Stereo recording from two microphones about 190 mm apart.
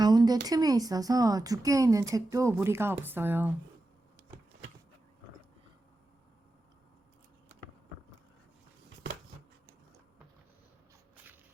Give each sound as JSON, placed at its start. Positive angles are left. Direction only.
{"t": 0.0, "sound": "speech", "side_deg": -20}